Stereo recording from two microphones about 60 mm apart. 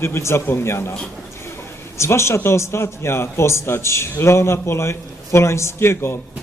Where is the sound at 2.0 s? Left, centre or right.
Left.